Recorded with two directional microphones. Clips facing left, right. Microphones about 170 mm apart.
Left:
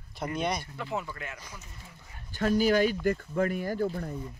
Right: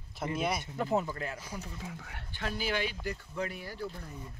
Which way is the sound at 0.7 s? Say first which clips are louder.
Right 4 dB; 40° right (ahead or behind).